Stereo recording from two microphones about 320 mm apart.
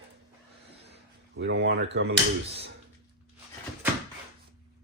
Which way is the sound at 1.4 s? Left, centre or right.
Right.